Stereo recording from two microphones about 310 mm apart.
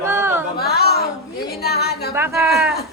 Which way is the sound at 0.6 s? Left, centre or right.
Left.